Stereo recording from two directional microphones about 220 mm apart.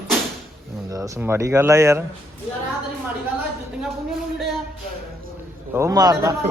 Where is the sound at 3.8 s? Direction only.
Centre (ahead or behind).